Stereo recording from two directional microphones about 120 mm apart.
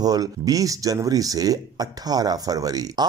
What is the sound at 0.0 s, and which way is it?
Speech, 30° right (ahead or behind).